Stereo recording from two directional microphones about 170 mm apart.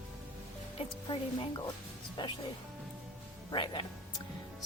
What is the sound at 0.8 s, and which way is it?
Speech, 30° left (ahead or behind).